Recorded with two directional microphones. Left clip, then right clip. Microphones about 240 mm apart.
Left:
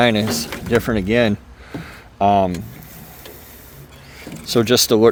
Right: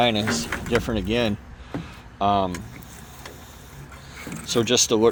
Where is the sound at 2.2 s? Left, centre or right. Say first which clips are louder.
Left 6 dB; left.